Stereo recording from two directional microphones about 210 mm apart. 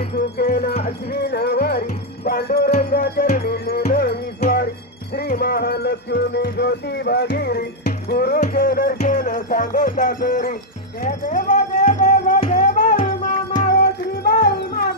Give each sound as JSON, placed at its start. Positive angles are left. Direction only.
{"t": 0.4, "sound": "music", "side_deg": 45}